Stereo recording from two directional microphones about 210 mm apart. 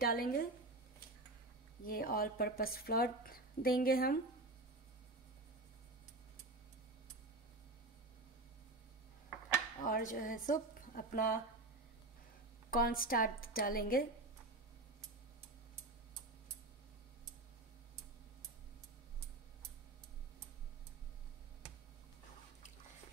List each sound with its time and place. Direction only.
0.0 s a woman's voice: 45° left (ahead or behind)
1.9 s a woman's voice: 45° left (ahead or behind)
9.8 s a woman's voice: 40° left (ahead or behind)
12.7 s a woman's voice: 45° left (ahead or behind)